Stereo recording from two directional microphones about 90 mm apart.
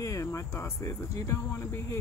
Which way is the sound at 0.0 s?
35° left (ahead or behind).